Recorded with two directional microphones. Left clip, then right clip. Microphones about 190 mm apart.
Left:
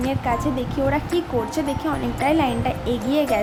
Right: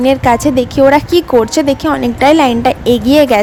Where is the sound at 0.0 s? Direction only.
55° right (ahead or behind).